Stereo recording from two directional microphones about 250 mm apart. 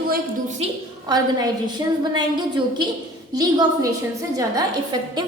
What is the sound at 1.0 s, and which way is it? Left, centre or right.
A woman's voice, centre.